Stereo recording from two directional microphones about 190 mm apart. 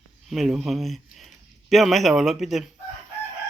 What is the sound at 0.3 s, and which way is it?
Speech, centre (ahead or behind).